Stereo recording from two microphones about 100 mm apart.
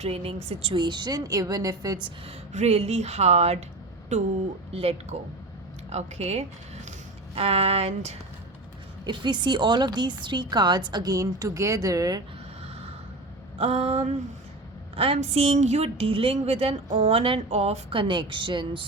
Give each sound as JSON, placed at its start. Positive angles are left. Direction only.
{"t": 0.0, "sound": "speech", "side_deg": -75}
{"t": 0.8, "sound": "a woman's voice", "side_deg": -50}
{"t": 2.6, "sound": "a woman's voice", "side_deg": -90}
{"t": 4.7, "sound": "a woman's voice", "side_deg": -75}
{"t": 7.3, "sound": "speech", "side_deg": -80}
{"t": 9.0, "sound": "a woman's voice", "side_deg": -50}
{"t": 13.6, "sound": "speech", "side_deg": -75}
{"t": 14.9, "sound": "a woman's voice", "side_deg": -75}
{"t": 18.1, "sound": "speech", "side_deg": -50}